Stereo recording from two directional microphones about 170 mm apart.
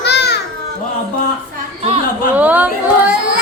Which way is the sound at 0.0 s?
75° left (ahead or behind).